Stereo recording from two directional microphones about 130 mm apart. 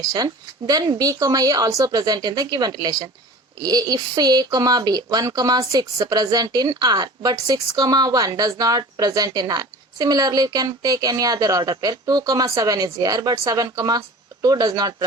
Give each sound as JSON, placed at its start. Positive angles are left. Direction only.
{"t": 0.0, "sound": "speech", "side_deg": -30}